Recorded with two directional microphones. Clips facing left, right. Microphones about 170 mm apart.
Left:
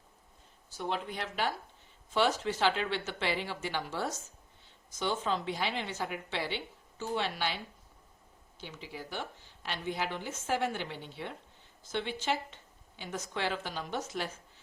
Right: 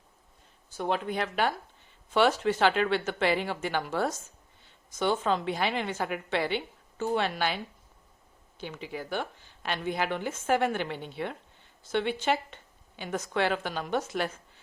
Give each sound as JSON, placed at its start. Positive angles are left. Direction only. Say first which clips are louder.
{"t": 0.8, "sound": "speech", "louder": "right 6 dB", "side_deg": -55}
{"t": 8.6, "sound": "speech", "louder": "right 6 dB", "side_deg": -55}